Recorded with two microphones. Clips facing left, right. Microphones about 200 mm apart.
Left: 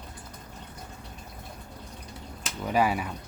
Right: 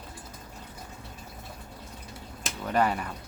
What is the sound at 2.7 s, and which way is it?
Speech, 5° left (ahead or behind).